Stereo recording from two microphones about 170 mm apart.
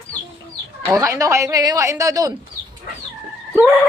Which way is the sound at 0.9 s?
15° right (ahead or behind).